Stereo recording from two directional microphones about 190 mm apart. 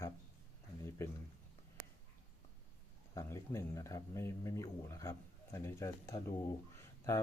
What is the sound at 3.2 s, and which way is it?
Speech, 15° left (ahead or behind).